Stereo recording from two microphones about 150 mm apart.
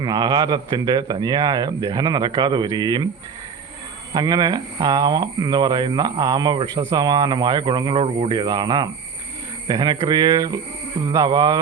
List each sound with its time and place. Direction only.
0.0 s speech: 25° right (ahead or behind)
4.1 s speech: 25° right (ahead or behind)